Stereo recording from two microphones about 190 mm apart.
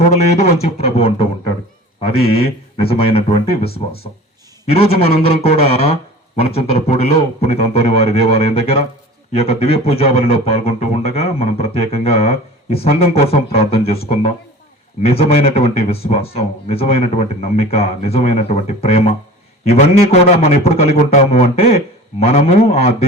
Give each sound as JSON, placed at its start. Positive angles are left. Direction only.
{"t": 0.1, "sound": "a man's voice", "side_deg": 35}
{"t": 4.6, "sound": "a man's voice", "side_deg": 30}